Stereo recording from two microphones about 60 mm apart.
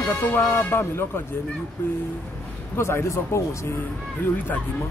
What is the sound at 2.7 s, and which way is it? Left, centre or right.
Speech, left.